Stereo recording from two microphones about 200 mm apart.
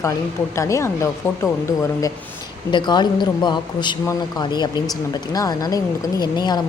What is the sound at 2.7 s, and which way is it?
A woman's voice, 20° left (ahead or behind).